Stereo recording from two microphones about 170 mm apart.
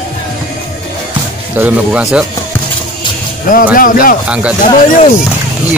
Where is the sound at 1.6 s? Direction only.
10° right (ahead or behind).